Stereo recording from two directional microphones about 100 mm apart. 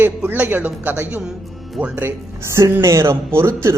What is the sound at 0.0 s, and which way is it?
Speech, 20° right (ahead or behind).